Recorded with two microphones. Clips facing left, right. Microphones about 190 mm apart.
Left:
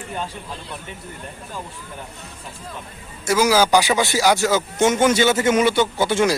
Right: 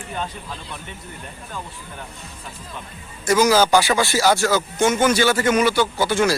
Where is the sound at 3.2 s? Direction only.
10° left (ahead or behind).